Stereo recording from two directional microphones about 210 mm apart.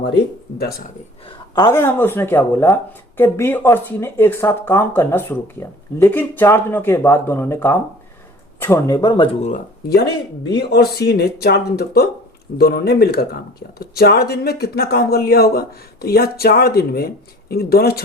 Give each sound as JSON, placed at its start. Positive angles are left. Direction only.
{"t": 1.5, "sound": "speech", "side_deg": 15}
{"t": 9.5, "sound": "speech", "side_deg": 50}